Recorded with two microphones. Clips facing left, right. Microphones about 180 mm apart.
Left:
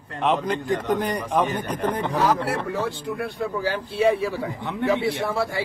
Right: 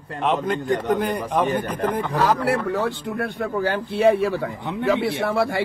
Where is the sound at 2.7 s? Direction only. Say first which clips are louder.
Right 3 dB; 65° right (ahead or behind).